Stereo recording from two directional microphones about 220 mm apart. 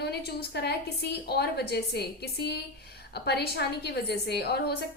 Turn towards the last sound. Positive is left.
turn(degrees=50)  # may be behind; listen again after turning